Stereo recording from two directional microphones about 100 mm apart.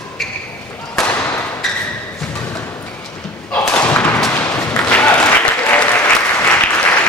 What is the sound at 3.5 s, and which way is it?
Thump, 15° left (ahead or behind).